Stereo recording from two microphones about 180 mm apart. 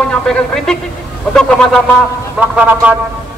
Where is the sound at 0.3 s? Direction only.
5° left (ahead or behind).